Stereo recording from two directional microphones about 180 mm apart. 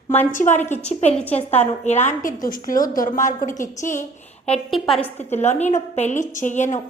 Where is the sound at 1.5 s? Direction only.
40° left (ahead or behind).